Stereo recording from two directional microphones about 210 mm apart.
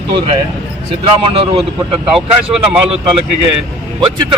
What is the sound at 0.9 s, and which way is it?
Speech, 25° right (ahead or behind).